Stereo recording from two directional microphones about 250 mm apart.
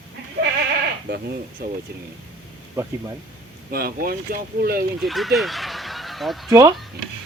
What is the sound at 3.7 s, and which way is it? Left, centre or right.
Speech, right.